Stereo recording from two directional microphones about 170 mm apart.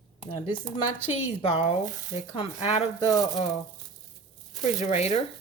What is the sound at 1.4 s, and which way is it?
Speech, 35° left (ahead or behind).